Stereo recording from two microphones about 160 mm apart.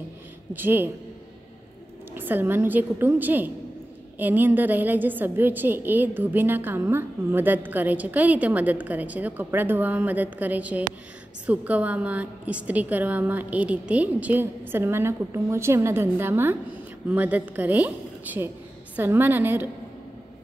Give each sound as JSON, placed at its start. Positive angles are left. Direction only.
{"t": 0.5, "sound": "a woman's voice", "side_deg": -15}
{"t": 2.1, "sound": "a woman's voice", "side_deg": -10}